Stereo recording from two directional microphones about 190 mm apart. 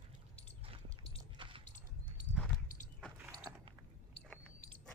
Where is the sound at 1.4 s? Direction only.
25° right (ahead or behind).